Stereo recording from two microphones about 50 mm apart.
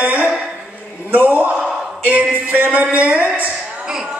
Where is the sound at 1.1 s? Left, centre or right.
Right.